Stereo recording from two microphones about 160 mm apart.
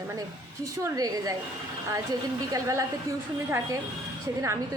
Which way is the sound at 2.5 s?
20° right (ahead or behind).